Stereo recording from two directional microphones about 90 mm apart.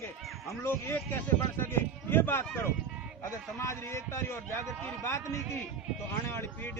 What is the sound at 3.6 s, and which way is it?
Speech, 30° left (ahead or behind).